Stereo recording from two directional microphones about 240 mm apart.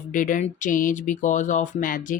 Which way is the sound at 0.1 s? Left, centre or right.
Left.